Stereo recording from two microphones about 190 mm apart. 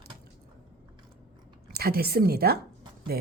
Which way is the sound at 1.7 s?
55° right (ahead or behind).